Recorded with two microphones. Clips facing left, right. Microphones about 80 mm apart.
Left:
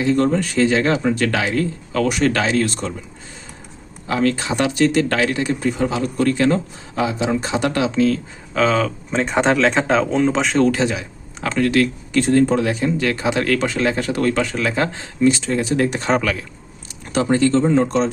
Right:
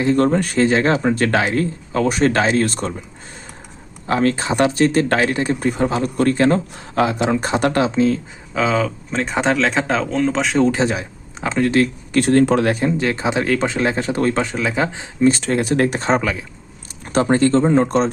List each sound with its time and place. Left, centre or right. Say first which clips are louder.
0.0 s speech: right 1 dB; right
4.0 s speech: right 1 dB; right
6.9 s speech: right 3 dB; right
7.9 s speech: even; right
8.5 s speech: left 1 dB; centre
10.7 s speech: right 1 dB; right
12.2 s speech: right 2 dB; right
13.0 s speech: even; right
14.5 s speech: even; centre
15.2 s speech: right 1 dB; right
16.0 s speech: right 1 dB; right
17.1 s speech: right 1 dB; right